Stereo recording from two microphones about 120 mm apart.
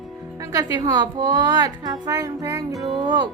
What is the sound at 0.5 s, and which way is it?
A woman's voice, 35° right (ahead or behind).